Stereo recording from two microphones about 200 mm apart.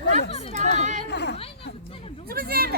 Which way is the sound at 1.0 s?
60° left (ahead or behind).